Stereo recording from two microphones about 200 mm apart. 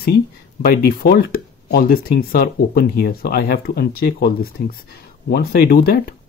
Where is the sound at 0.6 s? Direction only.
50° left (ahead or behind).